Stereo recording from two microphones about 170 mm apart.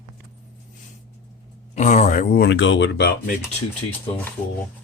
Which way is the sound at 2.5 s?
90° left.